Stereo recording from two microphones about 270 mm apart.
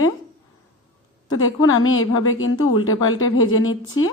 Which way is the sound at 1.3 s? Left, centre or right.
Left.